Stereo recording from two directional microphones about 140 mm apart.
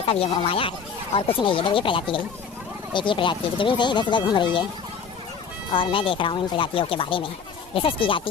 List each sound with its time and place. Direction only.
0.0 s speech: 40° left (ahead or behind)
5.7 s speech: 40° left (ahead or behind)